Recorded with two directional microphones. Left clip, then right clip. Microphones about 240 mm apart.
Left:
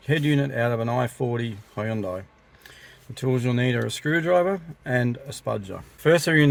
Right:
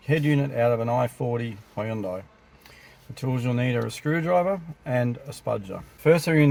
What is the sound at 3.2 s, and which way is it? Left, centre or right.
Speech, left.